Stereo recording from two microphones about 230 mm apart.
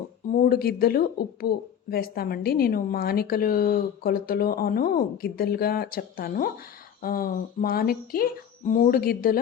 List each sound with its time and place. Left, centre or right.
0.3 s speech: left